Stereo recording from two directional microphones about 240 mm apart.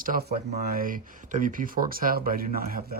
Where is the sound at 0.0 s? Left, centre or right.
Right.